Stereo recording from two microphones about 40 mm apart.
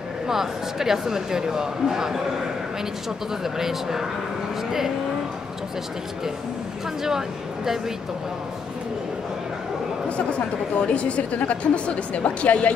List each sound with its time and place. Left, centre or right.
0.3 s speech: centre
3.4 s speech: centre
7.0 s speech: centre
10.9 s a woman's voice: left